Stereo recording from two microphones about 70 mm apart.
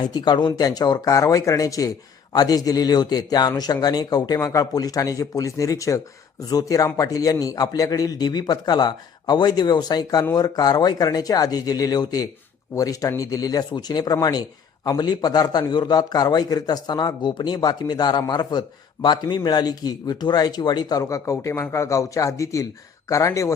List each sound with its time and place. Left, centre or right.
0.0 s speech: left
4.4 s speech: left
4.7 s speech: left
14.8 s a man's voice: left
19.0 s a man's voice: left
19.5 s speech: left
21.0 s speech: left